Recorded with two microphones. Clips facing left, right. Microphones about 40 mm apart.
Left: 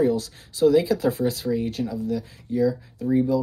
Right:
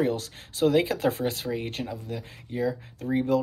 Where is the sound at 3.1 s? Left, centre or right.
Right.